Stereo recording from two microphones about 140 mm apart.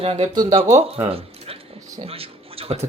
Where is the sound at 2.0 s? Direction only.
45° right (ahead or behind).